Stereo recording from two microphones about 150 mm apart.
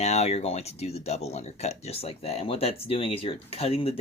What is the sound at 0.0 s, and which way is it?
Speech, 45° left (ahead or behind).